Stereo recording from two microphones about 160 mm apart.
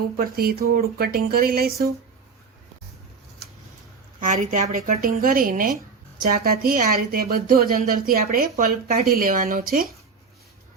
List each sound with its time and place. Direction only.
0.3 s speech: 70° right (ahead or behind)
4.2 s a woman's voice: 55° right (ahead or behind)